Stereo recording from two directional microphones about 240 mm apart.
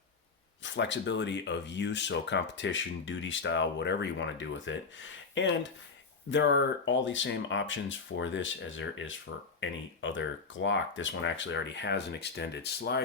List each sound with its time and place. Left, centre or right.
0.6 s speech: left